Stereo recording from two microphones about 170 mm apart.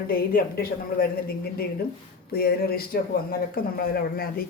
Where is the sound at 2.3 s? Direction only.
65° left (ahead or behind).